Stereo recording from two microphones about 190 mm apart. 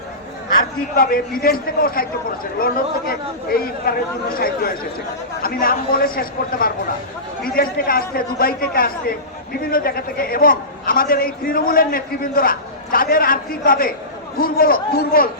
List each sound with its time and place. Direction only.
0.9 s a man's voice: 50° left (ahead or behind)